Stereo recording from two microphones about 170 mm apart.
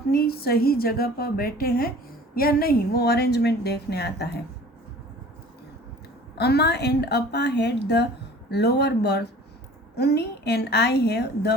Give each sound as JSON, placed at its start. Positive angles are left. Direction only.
{"t": 0.1, "sound": "a woman's voice", "side_deg": 65}
{"t": 6.3, "sound": "a woman's voice", "side_deg": 75}